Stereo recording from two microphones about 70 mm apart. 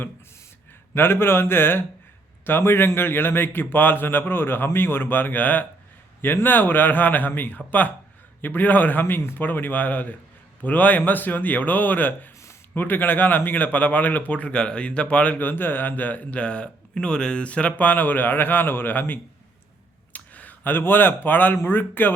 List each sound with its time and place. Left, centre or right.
0.9 s a man's voice: left